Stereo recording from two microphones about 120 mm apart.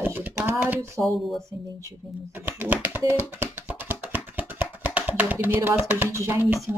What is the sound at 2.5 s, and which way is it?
Music, 15° right (ahead or behind).